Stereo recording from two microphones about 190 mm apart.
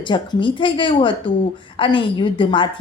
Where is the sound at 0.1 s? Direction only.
25° left (ahead or behind).